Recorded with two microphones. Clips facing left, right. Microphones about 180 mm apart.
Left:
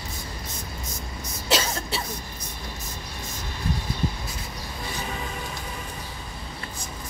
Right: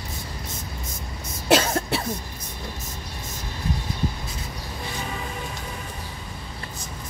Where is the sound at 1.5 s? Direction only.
55° right (ahead or behind).